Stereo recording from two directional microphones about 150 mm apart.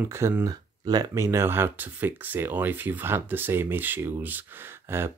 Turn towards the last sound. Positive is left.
turn(degrees=-15)  # may be behind; listen again after turning